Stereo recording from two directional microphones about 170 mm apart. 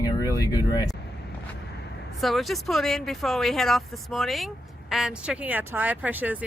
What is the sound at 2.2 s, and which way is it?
Speech, centre (ahead or behind).